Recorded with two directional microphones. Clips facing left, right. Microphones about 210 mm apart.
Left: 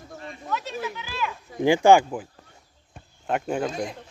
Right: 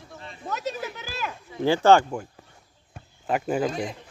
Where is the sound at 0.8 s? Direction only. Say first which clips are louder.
Left 2 dB; 40° right (ahead or behind).